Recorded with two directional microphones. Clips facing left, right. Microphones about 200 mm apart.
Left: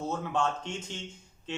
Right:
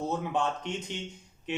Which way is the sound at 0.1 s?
15° right (ahead or behind).